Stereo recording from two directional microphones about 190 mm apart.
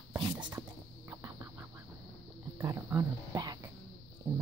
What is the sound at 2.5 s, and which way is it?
Speech, 15° right (ahead or behind).